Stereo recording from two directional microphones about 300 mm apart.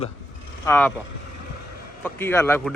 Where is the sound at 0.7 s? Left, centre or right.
Centre.